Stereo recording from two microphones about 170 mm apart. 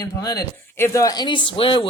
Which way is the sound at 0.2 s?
20° left (ahead or behind).